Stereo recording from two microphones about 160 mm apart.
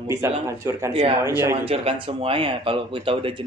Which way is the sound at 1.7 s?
35° right (ahead or behind).